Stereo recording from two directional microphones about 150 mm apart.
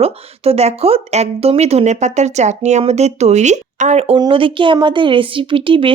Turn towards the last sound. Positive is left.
turn(degrees=-35)  # may be behind; listen again after turning